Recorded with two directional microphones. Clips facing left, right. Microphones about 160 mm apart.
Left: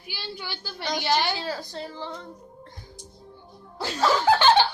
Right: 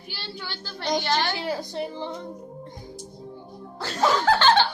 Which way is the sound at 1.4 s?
20° right (ahead or behind).